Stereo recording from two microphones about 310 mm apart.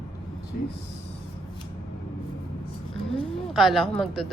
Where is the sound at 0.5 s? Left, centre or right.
Left.